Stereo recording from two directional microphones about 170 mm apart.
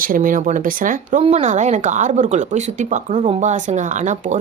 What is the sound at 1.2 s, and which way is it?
Speech, 45° right (ahead or behind).